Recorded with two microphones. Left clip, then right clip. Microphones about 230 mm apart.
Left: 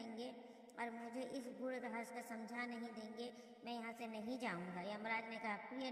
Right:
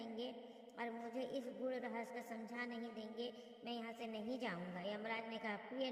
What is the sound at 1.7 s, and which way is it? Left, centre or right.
Speech, right.